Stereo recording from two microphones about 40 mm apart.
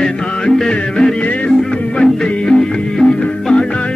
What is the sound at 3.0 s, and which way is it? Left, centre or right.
Music, centre.